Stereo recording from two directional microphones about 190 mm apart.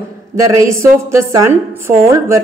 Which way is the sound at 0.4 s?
15° right (ahead or behind).